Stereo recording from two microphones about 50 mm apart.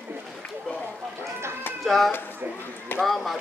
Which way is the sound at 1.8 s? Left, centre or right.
Centre.